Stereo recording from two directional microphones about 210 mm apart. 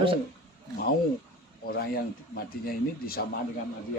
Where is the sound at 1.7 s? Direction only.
45° left (ahead or behind).